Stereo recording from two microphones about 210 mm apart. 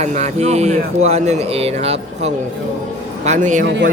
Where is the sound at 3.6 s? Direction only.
55° right (ahead or behind).